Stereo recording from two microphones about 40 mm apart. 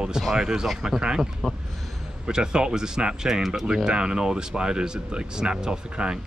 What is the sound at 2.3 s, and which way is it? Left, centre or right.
Speech, centre.